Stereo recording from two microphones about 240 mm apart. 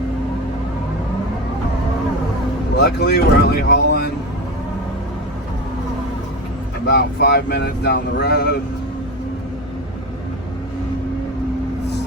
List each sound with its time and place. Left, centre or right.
2.7 s speech: left
6.8 s speech: left